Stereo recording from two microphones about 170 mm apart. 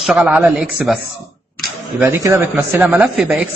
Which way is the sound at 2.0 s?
15° right (ahead or behind).